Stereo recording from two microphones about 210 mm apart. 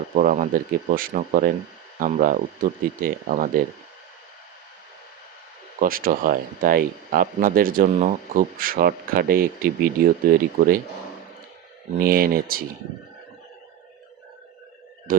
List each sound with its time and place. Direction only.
0.2 s speech: 40° right (ahead or behind)
5.8 s speech: 45° right (ahead or behind)
11.9 s speech: 45° right (ahead or behind)